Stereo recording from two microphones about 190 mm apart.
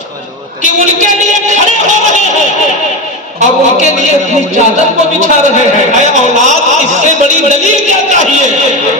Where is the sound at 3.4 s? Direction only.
35° right (ahead or behind).